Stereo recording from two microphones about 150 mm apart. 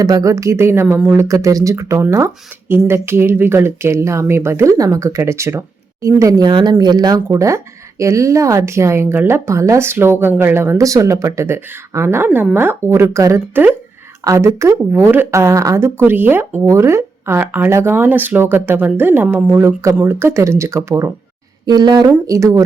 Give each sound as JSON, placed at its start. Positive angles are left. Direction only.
{"t": 0.0, "sound": "a woman's voice", "side_deg": -25}